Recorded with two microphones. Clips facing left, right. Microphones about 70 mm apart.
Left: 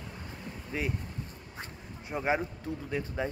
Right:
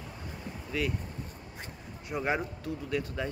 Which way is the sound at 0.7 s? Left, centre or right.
Left.